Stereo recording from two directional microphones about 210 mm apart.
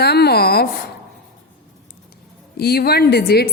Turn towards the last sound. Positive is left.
turn(degrees=50)  # may be behind; listen again after turning